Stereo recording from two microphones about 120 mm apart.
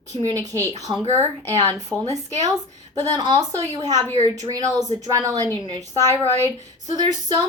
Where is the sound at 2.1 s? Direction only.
30° right (ahead or behind).